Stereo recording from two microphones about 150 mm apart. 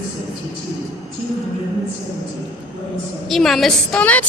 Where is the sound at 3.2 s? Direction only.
Centre (ahead or behind).